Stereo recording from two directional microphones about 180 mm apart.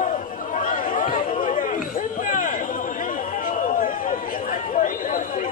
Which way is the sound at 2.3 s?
50° left (ahead or behind).